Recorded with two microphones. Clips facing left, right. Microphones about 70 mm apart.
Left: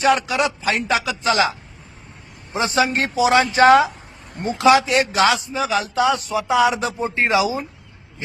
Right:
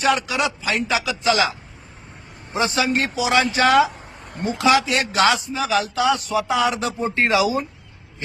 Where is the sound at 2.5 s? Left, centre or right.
Left.